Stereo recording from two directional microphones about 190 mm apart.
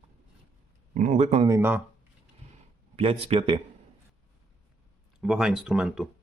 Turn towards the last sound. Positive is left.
turn(degrees=-5)  # may be behind; listen again after turning